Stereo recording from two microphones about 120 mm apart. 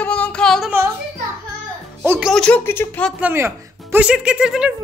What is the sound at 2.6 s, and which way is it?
Speech, 20° left (ahead or behind).